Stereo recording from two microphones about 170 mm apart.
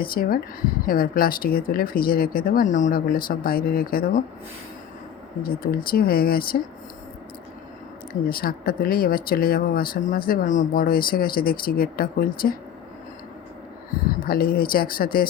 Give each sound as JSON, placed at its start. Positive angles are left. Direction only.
{"t": 0.0, "sound": "speech", "side_deg": 60}
{"t": 5.7, "sound": "speech", "side_deg": 60}
{"t": 8.3, "sound": "speech", "side_deg": 60}
{"t": 14.3, "sound": "speech", "side_deg": 60}